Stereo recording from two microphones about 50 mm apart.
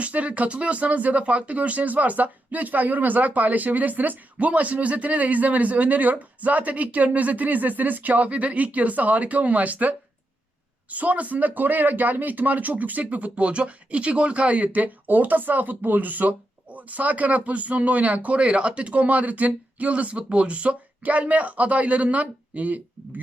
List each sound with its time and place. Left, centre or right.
0.0 s speech: right